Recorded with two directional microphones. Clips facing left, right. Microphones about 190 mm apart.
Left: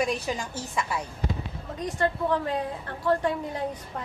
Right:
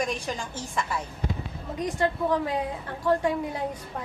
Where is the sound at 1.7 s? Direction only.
15° right (ahead or behind).